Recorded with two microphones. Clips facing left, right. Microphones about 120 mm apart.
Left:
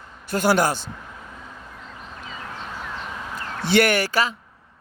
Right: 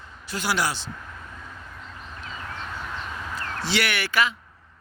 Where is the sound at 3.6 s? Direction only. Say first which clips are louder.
Left 9 dB; 50° left (ahead or behind).